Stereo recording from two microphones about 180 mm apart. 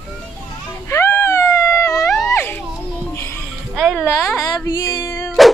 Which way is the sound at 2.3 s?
10° left (ahead or behind).